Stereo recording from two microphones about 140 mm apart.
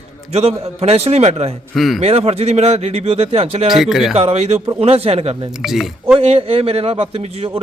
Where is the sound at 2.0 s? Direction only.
45° right (ahead or behind).